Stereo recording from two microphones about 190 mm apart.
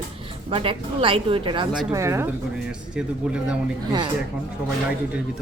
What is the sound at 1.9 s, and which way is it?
A man's voice, 15° right (ahead or behind).